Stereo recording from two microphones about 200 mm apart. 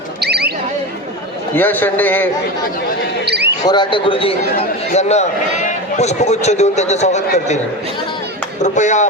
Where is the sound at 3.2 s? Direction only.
55° right (ahead or behind).